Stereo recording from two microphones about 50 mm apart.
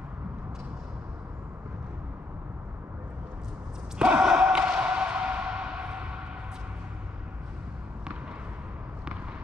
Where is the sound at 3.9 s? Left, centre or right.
Centre.